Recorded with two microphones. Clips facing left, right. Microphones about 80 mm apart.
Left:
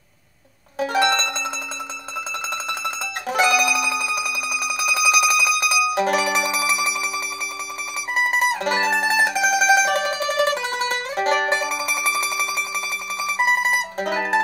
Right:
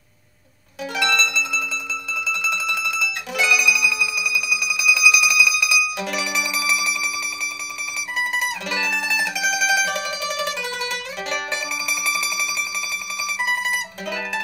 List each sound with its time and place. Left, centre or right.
0.7 s music: left
8.3 s mandolin: left
13.2 s music: left